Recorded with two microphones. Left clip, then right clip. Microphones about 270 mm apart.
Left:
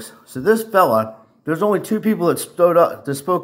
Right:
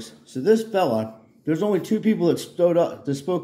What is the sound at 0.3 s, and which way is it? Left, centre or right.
Speech, centre.